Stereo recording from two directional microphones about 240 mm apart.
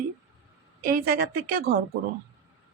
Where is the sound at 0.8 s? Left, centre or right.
Right.